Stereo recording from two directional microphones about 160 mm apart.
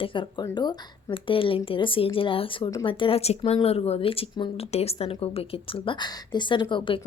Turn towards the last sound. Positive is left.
turn(degrees=30)  # may be behind; listen again after turning